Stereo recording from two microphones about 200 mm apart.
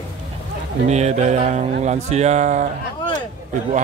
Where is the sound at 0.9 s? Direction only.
35° right (ahead or behind).